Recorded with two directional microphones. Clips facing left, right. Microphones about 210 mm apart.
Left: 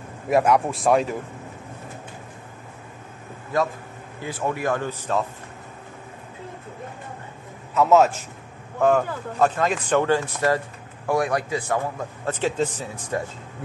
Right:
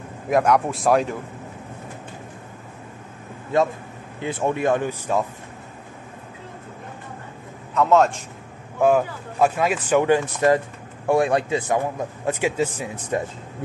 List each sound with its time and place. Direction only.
0.3 s speech: centre (ahead or behind)
4.2 s speech: 25° right (ahead or behind)
7.7 s speech: 5° left (ahead or behind)
8.8 s a man's voice: 10° right (ahead or behind)